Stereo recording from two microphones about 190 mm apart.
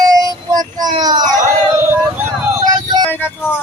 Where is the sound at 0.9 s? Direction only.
20° right (ahead or behind).